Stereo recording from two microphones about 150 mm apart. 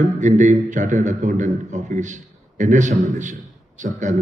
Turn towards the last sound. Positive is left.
turn(degrees=-55)  # may be behind; listen again after turning